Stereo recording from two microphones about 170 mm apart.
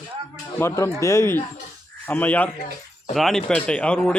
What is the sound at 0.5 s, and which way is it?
Speech, 15° left (ahead or behind).